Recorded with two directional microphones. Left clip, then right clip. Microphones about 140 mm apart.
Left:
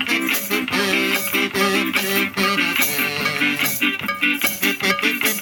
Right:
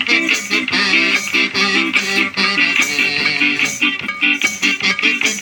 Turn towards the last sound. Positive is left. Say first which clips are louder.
# right 4 dB
turn(degrees=35)  # may be behind; listen again after turning